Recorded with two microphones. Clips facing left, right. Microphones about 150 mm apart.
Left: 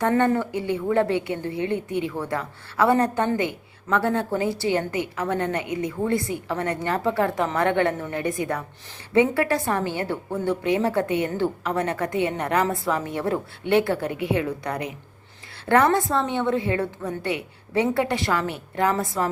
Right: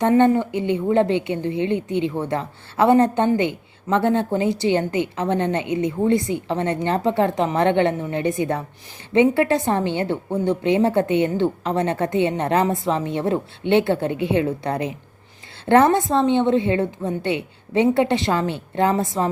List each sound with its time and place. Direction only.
0.0 s a woman's voice: 20° right (ahead or behind)